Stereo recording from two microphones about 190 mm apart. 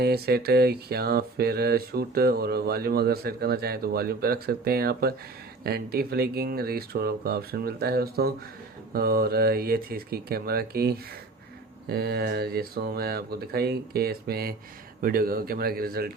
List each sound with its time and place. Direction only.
0.0 s mantra: 55° right (ahead or behind)
5.6 s speech: 55° right (ahead or behind)
11.9 s mantra: 55° right (ahead or behind)
15.0 s speech: 50° right (ahead or behind)